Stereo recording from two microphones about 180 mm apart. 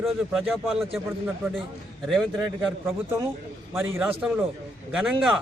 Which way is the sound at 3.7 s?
10° right (ahead or behind).